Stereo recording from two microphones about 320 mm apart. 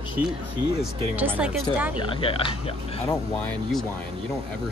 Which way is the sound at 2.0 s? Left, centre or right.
Centre.